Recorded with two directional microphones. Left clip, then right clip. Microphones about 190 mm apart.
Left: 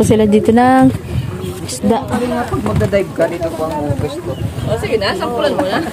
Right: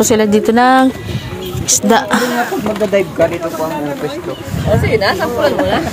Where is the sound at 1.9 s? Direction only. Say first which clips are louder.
Right 4 dB; 5° left (ahead or behind).